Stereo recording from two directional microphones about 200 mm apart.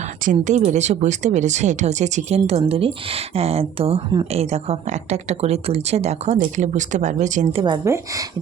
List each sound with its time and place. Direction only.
0.3 s a woman's voice: 35° right (ahead or behind)
7.6 s speech: 15° right (ahead or behind)